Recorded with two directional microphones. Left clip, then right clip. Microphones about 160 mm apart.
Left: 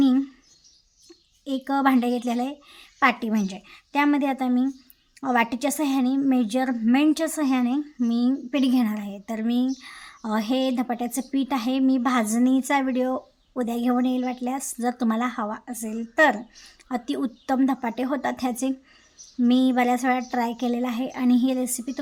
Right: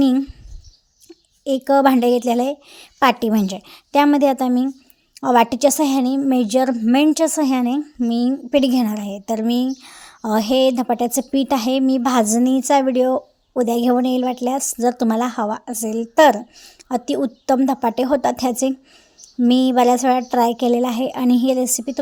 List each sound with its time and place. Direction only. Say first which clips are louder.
0.0 s bird vocalization: right 4 dB; 30° right (ahead or behind)
1.5 s a woman's voice: right 8 dB; 35° right (ahead or behind)
16.6 s a woman's voice: right 7 dB; 30° right (ahead or behind)